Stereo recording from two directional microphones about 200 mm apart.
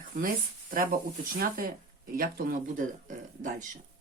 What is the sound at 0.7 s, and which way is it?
Speech, 45° right (ahead or behind).